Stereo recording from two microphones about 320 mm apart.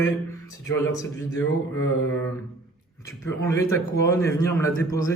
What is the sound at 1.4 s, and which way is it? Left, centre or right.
Mantra, left.